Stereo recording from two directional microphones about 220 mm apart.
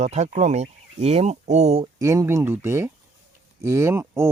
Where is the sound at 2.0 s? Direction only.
15° right (ahead or behind).